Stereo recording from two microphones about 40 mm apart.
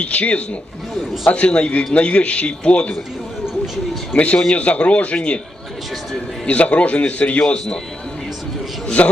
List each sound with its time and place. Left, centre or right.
0.0 s a man's voice: left
4.1 s a man's voice: left
6.4 s a man's voice: left
9.0 s a man's voice: left